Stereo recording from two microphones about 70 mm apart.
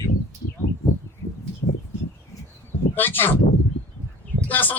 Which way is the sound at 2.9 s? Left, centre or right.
Left.